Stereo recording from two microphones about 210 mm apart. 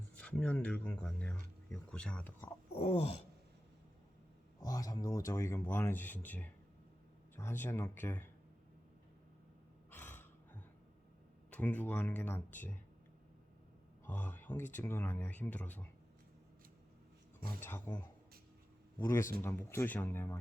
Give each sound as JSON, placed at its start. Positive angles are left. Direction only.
{"t": 0.2, "sound": "speech", "side_deg": 5}
{"t": 2.7, "sound": "groan", "side_deg": 30}
{"t": 4.6, "sound": "speech", "side_deg": 15}
{"t": 9.9, "sound": "gasp", "side_deg": 10}
{"t": 11.5, "sound": "speech", "side_deg": 10}
{"t": 14.0, "sound": "speech", "side_deg": 10}
{"t": 17.6, "sound": "speech", "side_deg": 10}